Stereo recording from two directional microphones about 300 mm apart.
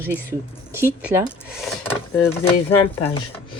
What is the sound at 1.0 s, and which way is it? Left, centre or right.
Speech, centre.